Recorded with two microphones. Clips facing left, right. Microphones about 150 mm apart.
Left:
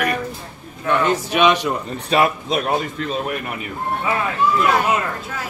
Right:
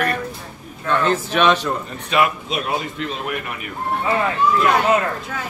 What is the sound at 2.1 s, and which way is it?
Speech, 35° left (ahead or behind).